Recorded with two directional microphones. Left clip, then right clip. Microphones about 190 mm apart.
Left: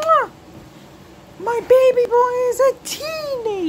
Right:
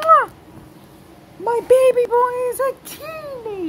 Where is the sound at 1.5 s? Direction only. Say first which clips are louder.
Even; centre (ahead or behind).